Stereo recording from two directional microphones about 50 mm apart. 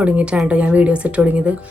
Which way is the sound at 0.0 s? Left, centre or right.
Right.